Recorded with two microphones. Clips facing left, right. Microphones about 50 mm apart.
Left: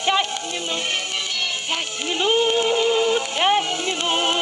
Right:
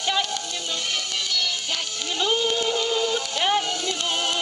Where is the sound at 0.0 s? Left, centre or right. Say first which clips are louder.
Left 4 dB; left.